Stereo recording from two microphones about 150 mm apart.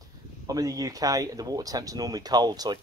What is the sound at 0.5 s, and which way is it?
Speech, 25° right (ahead or behind).